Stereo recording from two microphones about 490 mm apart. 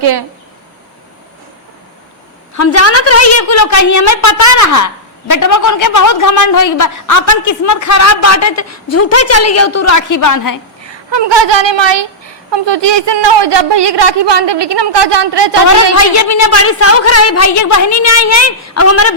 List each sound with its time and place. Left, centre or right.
0.0 s speech: right
2.6 s a woman's voice: left
11.1 s a woman's voice: right
16.0 s a woman's voice: left